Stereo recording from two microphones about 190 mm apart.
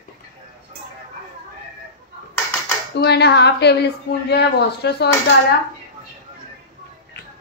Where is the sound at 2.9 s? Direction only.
60° left (ahead or behind).